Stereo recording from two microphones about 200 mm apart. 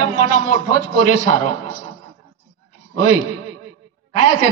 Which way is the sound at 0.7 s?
40° left (ahead or behind).